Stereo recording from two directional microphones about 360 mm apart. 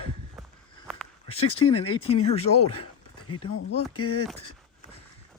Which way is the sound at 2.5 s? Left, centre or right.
Left.